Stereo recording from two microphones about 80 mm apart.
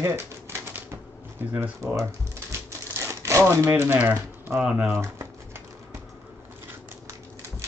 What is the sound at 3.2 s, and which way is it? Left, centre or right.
Speech, right.